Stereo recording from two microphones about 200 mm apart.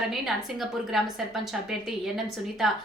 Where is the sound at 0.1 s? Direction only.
Centre (ahead or behind).